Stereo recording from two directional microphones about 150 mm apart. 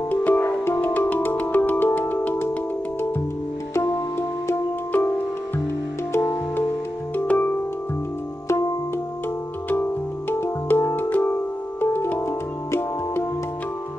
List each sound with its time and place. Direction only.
0.1 s music: 15° left (ahead or behind)
3.7 s music: 20° left (ahead or behind)
6.1 s music: 15° left (ahead or behind)
8.5 s music: 20° left (ahead or behind)
10.3 s music: 15° left (ahead or behind)